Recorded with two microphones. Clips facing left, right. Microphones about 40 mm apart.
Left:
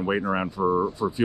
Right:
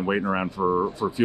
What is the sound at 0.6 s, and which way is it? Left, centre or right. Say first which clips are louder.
Speech: even; centre.